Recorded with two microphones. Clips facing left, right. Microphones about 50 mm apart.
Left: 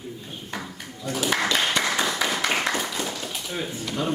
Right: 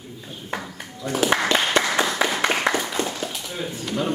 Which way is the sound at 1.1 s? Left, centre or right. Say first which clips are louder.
Right 5 dB; right.